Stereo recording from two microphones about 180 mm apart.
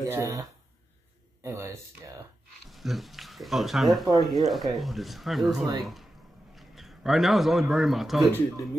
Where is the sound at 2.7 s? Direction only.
Centre (ahead or behind).